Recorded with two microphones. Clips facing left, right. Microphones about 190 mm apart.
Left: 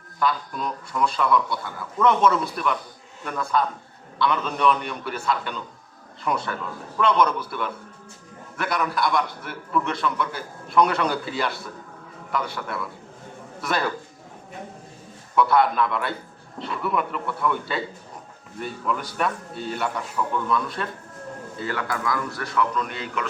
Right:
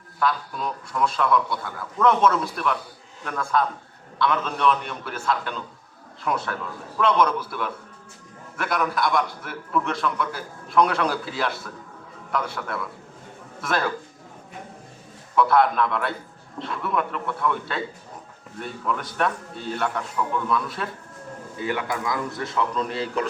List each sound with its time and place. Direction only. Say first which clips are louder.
0.2 s a man's voice: even; centre (ahead or behind)
15.4 s a man's voice: even; centre (ahead or behind)
21.6 s a man's voice: right 1 dB; 15° right (ahead or behind); by 23.3 s 35° right (ahead or behind)